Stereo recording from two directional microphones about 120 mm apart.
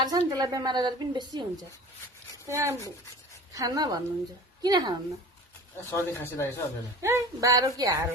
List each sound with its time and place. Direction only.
0.0 s a woman's voice: 30° right (ahead or behind)
2.5 s a woman's voice: 25° right (ahead or behind)
5.9 s speech: 20° left (ahead or behind)
7.0 s a woman's voice: 25° right (ahead or behind)